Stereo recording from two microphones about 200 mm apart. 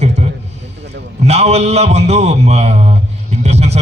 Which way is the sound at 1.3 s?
35° right (ahead or behind).